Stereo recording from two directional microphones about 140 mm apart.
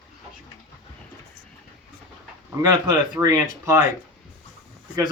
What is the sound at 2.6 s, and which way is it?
A man's voice, 30° right (ahead or behind).